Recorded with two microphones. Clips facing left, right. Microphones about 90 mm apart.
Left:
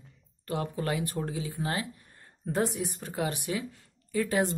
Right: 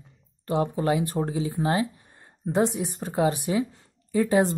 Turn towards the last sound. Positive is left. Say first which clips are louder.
# right 6 dB
turn(degrees=-25)  # may be behind; listen again after turning